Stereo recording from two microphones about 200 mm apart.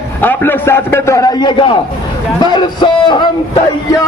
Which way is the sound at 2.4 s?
20° left (ahead or behind).